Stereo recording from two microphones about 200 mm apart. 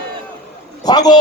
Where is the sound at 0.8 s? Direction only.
20° left (ahead or behind).